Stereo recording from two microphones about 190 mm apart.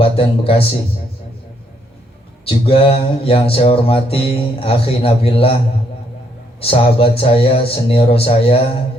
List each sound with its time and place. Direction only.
0.0 s a man's voice: 30° left (ahead or behind)
2.5 s music: 30° left (ahead or behind)
6.6 s music: 30° left (ahead or behind)